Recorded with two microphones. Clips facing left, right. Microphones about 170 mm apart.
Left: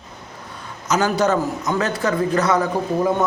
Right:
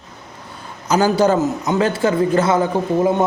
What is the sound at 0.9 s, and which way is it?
A man's voice, 30° right (ahead or behind).